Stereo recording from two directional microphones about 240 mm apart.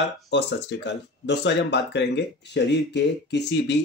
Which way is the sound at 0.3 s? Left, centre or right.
Left.